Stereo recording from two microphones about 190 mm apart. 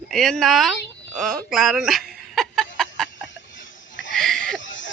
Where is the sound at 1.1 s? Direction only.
Centre (ahead or behind).